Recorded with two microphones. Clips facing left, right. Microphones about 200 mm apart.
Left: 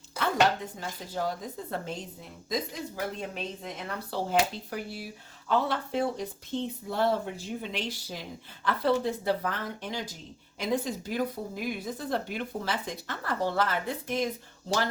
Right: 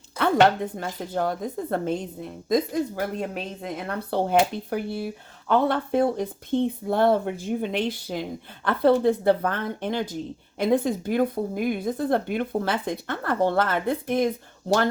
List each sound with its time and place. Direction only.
0.2 s speech: 60° right (ahead or behind)